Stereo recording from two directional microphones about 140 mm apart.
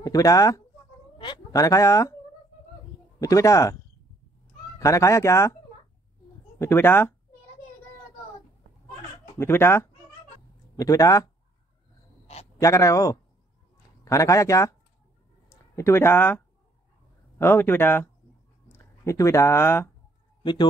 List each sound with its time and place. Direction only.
0.0 s speech: 25° left (ahead or behind)
1.1 s a sound: 35° left (ahead or behind)
1.5 s fowl: 25° left (ahead or behind)
3.2 s fowl: 25° left (ahead or behind)
4.7 s fowl: 20° left (ahead or behind)
6.6 s speech: 15° left (ahead or behind)
9.4 s speech: 15° left (ahead or behind)
10.8 s fowl: 25° left (ahead or behind)
12.5 s fowl: 25° left (ahead or behind)
15.5 s speech: 20° left (ahead or behind)